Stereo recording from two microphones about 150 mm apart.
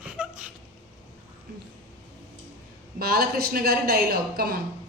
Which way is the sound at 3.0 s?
90° right.